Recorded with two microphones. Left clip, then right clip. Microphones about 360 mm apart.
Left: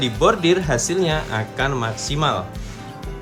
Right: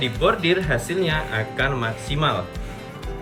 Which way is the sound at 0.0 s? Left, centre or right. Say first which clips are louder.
Left 3 dB; centre.